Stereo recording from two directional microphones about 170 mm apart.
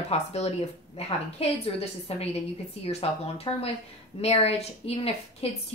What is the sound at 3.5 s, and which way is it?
Speech, 30° left (ahead or behind).